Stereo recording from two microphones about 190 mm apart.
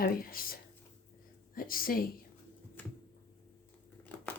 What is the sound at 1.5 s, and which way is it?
Speech, 50° left (ahead or behind).